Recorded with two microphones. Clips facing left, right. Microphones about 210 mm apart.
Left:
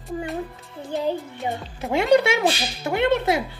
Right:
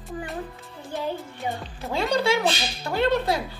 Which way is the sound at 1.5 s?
20° left (ahead or behind).